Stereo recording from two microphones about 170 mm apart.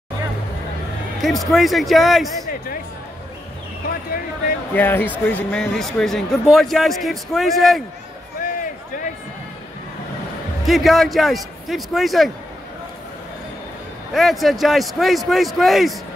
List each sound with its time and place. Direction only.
1.2 s a man's voice: centre (ahead or behind)
4.7 s a man's voice: 10° left (ahead or behind)
8.4 s a sound: 55° left (ahead or behind)
10.6 s a man's voice: centre (ahead or behind)
14.1 s a man's voice: centre (ahead or behind)